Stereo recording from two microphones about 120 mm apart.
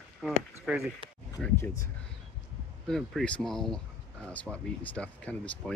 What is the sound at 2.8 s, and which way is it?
Speech, 5° left (ahead or behind).